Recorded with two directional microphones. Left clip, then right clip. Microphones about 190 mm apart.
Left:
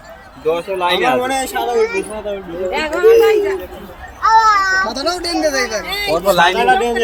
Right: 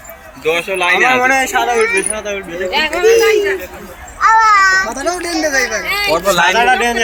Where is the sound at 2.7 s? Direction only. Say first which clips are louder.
Right 4 dB; 45° left (ahead or behind).